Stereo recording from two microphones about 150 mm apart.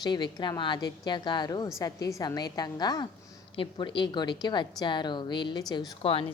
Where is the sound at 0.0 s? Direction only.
30° left (ahead or behind).